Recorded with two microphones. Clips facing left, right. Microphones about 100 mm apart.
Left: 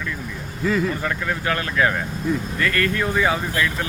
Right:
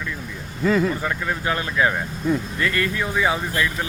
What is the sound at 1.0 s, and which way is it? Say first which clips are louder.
Speech: even; 15° right (ahead or behind).